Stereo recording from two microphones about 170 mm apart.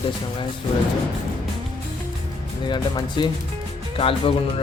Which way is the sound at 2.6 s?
25° left (ahead or behind).